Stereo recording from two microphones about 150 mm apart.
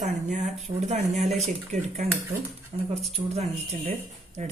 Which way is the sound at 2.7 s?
55° right (ahead or behind).